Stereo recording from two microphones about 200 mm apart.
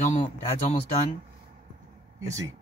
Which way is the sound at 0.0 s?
35° left (ahead or behind).